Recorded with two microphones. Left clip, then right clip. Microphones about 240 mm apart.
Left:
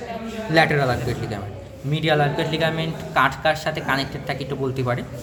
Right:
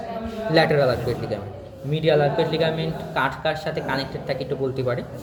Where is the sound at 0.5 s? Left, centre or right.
Centre.